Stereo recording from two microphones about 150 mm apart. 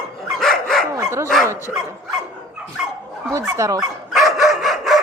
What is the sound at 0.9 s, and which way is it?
Dog, 20° right (ahead or behind).